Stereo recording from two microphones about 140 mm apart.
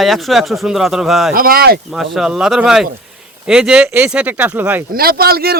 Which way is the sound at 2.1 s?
5° right (ahead or behind).